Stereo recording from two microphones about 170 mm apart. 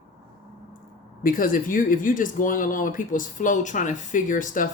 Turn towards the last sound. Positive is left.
turn(degrees=50)  # may be behind; listen again after turning